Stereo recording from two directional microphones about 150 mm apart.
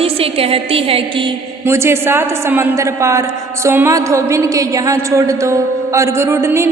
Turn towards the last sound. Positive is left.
turn(degrees=-20)  # may be behind; listen again after turning